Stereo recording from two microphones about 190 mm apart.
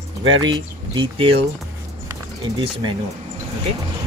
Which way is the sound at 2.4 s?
25° right (ahead or behind).